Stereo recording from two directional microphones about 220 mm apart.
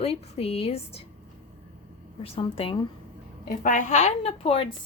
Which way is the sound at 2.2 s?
25° left (ahead or behind).